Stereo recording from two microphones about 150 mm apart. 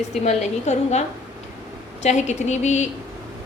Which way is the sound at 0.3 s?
50° left (ahead or behind).